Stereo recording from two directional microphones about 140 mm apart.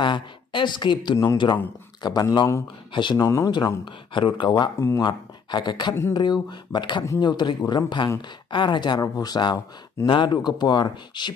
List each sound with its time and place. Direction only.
0.0 s speech: 35° left (ahead or behind)
2.9 s speech: 35° left (ahead or behind)
3.3 s speech: 20° left (ahead or behind)
4.7 s speech: 20° left (ahead or behind)
5.0 s speech: 30° left (ahead or behind)